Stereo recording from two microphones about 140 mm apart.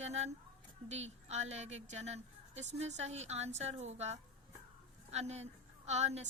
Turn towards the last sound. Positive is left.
turn(degrees=-50)  # may be behind; listen again after turning